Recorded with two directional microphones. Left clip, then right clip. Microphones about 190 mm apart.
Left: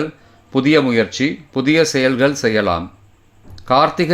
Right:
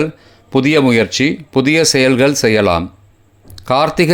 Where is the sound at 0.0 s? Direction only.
30° right (ahead or behind).